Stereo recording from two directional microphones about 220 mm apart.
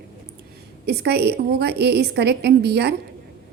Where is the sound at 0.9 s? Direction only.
50° right (ahead or behind).